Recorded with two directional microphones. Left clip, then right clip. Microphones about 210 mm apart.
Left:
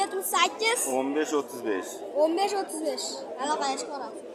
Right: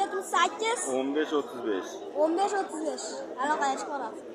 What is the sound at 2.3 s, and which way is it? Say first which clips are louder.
A woman's voice: even; 15° left (ahead or behind).